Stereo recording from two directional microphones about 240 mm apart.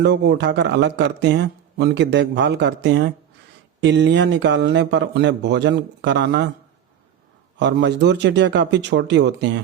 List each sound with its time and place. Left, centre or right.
0.0 s speech: right
7.6 s speech: right